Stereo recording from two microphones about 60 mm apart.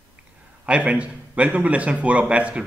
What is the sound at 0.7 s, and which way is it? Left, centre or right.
A man's voice, centre.